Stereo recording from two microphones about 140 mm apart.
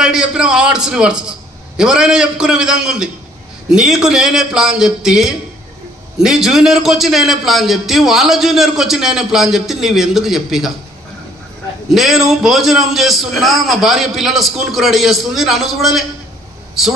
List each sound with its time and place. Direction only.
0.0 s a man's voice: 5° right (ahead or behind)
11.9 s a man's voice: centre (ahead or behind)